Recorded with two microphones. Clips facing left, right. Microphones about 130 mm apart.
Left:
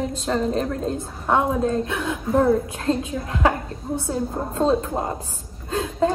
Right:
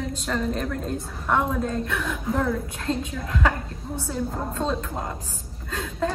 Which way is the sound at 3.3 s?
25° left (ahead or behind).